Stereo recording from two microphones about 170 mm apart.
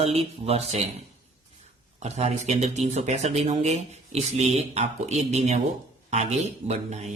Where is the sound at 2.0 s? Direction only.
40° right (ahead or behind).